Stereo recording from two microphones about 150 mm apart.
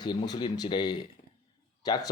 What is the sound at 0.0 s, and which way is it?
Speech, 30° left (ahead or behind).